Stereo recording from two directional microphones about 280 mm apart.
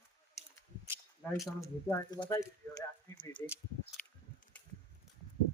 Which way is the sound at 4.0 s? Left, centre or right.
Centre.